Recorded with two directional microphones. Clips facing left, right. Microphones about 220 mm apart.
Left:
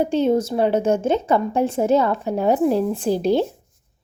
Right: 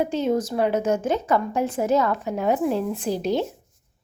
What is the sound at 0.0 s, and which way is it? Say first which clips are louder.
Speech: left 4 dB; 30° left (ahead or behind).